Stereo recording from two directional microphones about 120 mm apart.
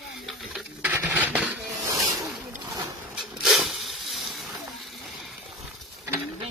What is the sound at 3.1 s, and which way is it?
Rub, 5° right (ahead or behind).